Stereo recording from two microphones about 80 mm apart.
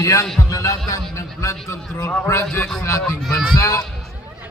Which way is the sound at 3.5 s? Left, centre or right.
Left.